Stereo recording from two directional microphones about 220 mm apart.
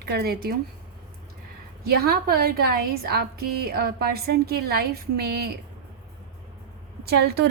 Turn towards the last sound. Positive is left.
turn(degrees=-45)  # may be behind; listen again after turning